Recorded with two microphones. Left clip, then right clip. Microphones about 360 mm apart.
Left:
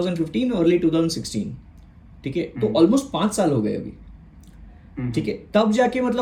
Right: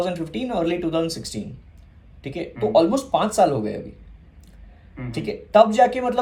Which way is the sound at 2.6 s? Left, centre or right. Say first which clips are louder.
Right 1 dB; centre.